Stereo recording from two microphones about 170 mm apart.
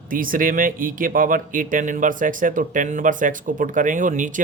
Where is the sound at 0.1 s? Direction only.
55° right (ahead or behind).